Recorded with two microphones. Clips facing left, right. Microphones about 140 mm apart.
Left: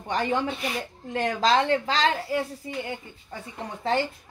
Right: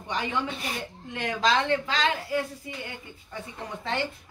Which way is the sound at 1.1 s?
35° left (ahead or behind).